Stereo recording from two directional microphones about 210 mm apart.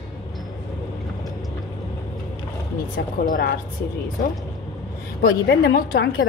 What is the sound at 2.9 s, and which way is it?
Speech, 40° left (ahead or behind).